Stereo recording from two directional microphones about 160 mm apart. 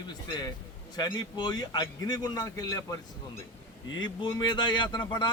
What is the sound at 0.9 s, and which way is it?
A man's voice, 25° left (ahead or behind).